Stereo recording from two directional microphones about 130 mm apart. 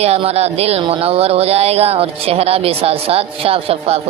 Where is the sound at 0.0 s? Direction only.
50° right (ahead or behind).